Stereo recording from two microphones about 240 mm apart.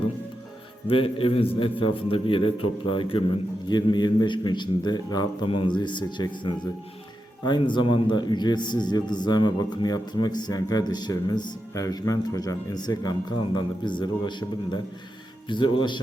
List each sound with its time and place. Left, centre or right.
0.9 s a man's voice: left